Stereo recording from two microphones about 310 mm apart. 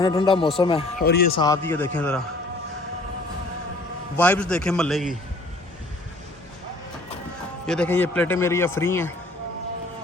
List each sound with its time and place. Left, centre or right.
0.0 s a man's voice: centre
1.0 s a man's voice: left
1.4 s a man's voice: centre
4.2 s a man's voice: centre
7.7 s a man's voice: centre